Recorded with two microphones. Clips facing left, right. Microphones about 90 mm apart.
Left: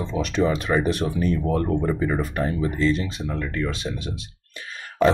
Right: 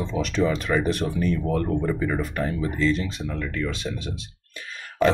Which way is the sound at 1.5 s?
15° left (ahead or behind).